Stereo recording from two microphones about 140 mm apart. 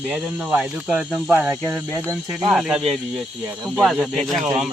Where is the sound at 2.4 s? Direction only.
5° right (ahead or behind).